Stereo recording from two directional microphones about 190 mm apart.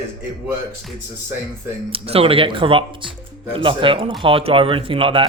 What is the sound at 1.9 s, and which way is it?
Speech, 30° right (ahead or behind).